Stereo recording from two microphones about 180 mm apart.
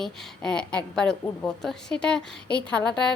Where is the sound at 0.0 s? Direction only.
5° left (ahead or behind).